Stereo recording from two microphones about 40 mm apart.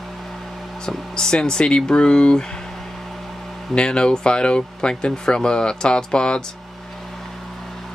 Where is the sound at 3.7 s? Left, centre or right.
Left.